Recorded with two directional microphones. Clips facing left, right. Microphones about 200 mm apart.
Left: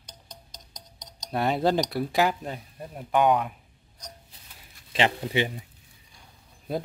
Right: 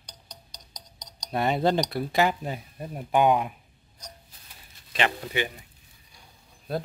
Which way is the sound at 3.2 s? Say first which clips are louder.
Even; 20° right (ahead or behind).